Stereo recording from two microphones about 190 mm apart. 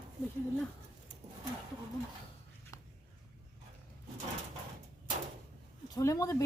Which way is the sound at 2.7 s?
15° left (ahead or behind).